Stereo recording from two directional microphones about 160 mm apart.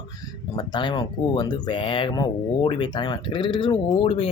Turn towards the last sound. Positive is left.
turn(degrees=35)  # may be behind; listen again after turning